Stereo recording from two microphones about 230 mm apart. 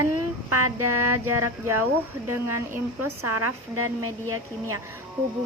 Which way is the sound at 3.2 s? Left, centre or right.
Right.